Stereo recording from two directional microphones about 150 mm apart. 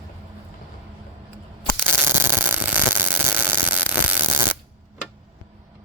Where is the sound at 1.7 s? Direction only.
15° right (ahead or behind).